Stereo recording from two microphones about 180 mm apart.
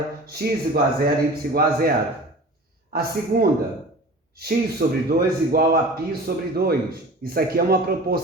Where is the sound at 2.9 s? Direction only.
55° right (ahead or behind).